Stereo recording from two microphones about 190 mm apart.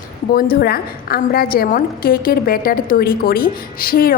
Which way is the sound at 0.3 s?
50° left (ahead or behind).